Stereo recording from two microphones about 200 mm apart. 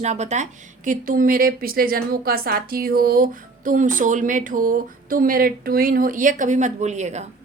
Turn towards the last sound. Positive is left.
turn(degrees=-35)  # may be behind; listen again after turning